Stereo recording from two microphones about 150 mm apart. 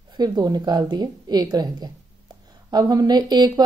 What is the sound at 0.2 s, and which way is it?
Speech, 25° right (ahead or behind).